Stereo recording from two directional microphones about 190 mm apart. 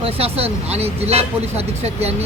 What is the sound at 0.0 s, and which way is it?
Speech, 30° right (ahead or behind).